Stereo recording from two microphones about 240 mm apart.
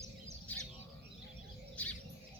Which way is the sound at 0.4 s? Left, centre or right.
Centre.